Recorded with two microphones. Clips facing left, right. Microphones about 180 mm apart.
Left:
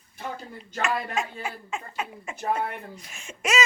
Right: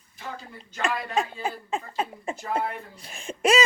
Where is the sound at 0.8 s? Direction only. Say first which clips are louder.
Right 1 dB; 30° right (ahead or behind).